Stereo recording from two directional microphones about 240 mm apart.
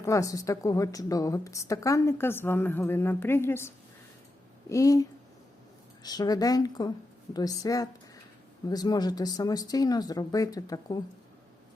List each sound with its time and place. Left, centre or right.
0.0 s a woman's voice: centre
4.7 s a woman's voice: centre